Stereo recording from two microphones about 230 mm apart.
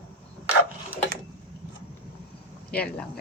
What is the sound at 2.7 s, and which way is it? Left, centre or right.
Speech, centre.